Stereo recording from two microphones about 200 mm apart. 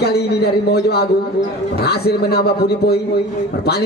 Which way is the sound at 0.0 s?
50° left (ahead or behind).